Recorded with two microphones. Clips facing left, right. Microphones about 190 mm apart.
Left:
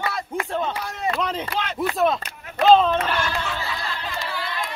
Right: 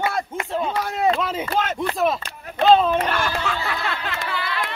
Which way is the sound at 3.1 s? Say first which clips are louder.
Right 2 dB; 50° right (ahead or behind).